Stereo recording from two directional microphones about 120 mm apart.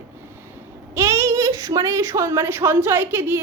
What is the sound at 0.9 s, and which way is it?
A woman's voice, 25° right (ahead or behind).